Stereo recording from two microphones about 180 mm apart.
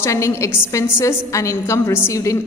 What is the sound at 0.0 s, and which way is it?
A woman's voice, 15° left (ahead or behind).